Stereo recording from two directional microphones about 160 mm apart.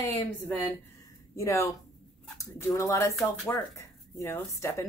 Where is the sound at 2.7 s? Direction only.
20° left (ahead or behind).